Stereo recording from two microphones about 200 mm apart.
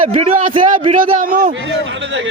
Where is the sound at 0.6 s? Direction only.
40° right (ahead or behind).